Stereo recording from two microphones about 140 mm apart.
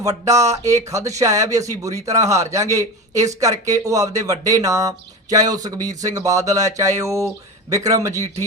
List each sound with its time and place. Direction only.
0.0 s speech: 25° right (ahead or behind)